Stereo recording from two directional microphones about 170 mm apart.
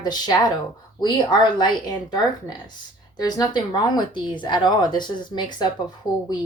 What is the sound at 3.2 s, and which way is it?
Speech, 25° left (ahead or behind).